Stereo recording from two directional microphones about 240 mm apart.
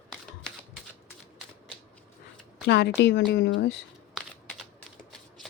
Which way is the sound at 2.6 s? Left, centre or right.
Left.